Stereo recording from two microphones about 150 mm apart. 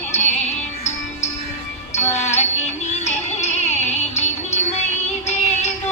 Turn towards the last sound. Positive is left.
turn(degrees=50)  # may be behind; listen again after turning